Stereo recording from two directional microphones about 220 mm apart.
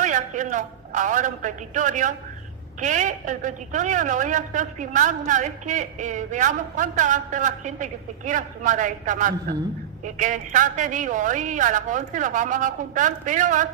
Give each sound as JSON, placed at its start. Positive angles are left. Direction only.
{"t": 0.0, "sound": "a man's voice", "side_deg": -35}